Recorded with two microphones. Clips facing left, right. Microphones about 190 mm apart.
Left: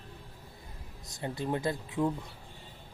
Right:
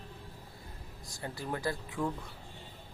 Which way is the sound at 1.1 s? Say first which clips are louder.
Left 5 dB; 20° left (ahead or behind).